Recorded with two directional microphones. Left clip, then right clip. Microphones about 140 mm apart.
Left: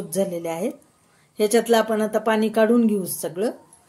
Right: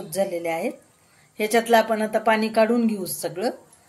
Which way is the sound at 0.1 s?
90° left.